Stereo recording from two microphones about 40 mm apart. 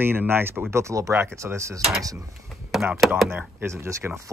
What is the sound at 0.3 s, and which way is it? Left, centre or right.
Speech, right.